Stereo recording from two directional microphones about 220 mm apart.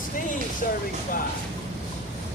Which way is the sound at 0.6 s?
40° left (ahead or behind).